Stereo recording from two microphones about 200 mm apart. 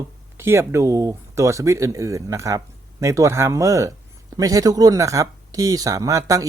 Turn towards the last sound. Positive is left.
turn(degrees=-15)  # may be behind; listen again after turning